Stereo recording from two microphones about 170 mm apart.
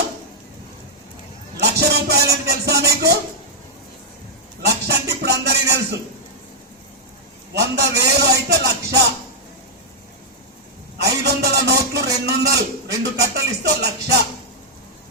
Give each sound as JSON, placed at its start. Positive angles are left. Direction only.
{"t": 1.6, "sound": "music", "side_deg": -75}
{"t": 4.6, "sound": "music", "side_deg": -70}
{"t": 7.5, "sound": "music", "side_deg": -75}
{"t": 10.9, "sound": "a man's voice", "side_deg": -70}